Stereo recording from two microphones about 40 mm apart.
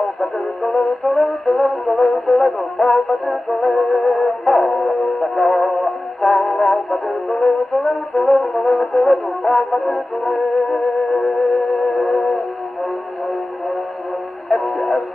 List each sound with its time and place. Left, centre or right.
0.2 s music: centre
14.5 s music: centre